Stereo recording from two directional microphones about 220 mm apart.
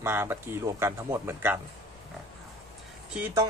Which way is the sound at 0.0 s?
10° right (ahead or behind).